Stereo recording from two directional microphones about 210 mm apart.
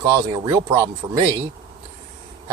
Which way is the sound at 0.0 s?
20° right (ahead or behind).